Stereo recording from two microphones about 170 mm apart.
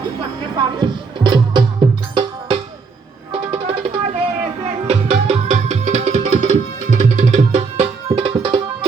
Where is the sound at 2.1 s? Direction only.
30° right (ahead or behind).